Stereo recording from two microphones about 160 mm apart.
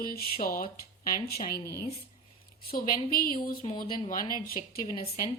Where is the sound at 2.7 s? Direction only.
65° left (ahead or behind).